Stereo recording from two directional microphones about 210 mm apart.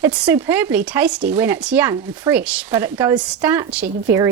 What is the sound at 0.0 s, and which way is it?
Speech, 10° right (ahead or behind).